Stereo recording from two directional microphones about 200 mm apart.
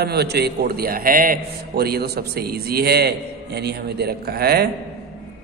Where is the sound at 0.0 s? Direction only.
55° right (ahead or behind).